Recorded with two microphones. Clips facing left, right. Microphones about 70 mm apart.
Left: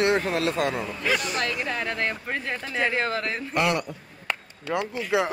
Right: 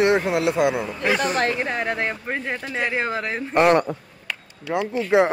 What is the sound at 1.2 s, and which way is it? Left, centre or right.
Speech, right.